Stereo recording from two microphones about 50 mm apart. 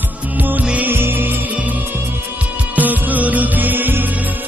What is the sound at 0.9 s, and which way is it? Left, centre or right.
Music, right.